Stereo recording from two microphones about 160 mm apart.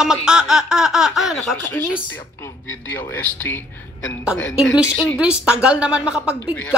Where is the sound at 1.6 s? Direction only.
10° left (ahead or behind).